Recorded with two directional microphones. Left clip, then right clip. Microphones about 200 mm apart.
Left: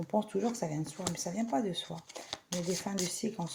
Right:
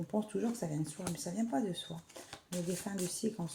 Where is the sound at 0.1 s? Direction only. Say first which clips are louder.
Left 5 dB; 30° left (ahead or behind).